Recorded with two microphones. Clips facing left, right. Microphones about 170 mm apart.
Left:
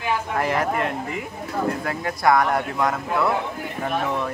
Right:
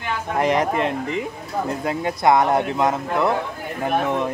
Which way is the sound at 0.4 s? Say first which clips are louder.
Right 6 dB; 20° right (ahead or behind).